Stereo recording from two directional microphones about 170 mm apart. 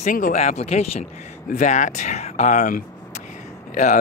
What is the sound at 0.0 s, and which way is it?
Speech, 50° left (ahead or behind).